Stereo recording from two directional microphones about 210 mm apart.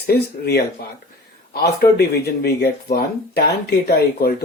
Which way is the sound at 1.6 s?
50° left (ahead or behind).